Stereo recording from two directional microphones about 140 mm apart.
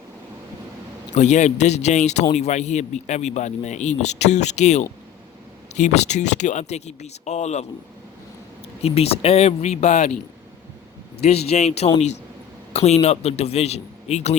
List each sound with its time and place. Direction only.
1.1 s a man's voice: 55° left (ahead or behind)
8.8 s a man's voice: 45° left (ahead or behind)
11.2 s a man's voice: 50° left (ahead or behind)